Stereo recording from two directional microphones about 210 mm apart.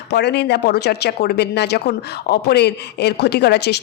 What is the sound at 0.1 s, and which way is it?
Speech, 55° left (ahead or behind).